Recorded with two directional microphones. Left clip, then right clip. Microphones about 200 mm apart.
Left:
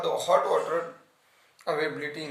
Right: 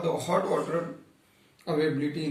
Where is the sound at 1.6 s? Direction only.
50° left (ahead or behind).